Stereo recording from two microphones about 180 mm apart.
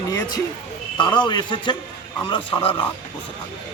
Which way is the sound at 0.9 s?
25° left (ahead or behind).